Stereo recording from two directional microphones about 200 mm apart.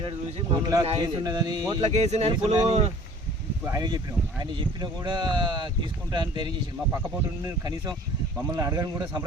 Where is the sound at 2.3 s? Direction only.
20° right (ahead or behind).